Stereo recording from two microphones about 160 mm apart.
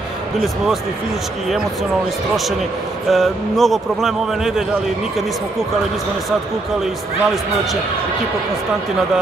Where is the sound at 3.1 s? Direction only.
Centre (ahead or behind).